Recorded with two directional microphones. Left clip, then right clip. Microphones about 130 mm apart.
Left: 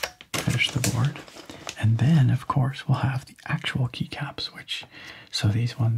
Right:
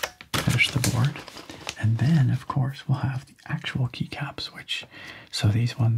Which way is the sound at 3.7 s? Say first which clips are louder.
Left 1 dB; 5° right (ahead or behind).